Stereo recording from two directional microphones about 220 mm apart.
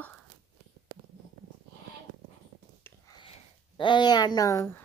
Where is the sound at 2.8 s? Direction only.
20° left (ahead or behind).